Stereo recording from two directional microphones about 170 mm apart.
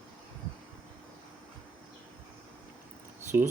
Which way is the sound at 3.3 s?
10° right (ahead or behind).